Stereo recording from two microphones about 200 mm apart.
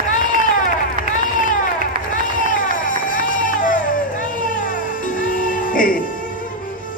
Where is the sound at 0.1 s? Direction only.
40° left (ahead or behind).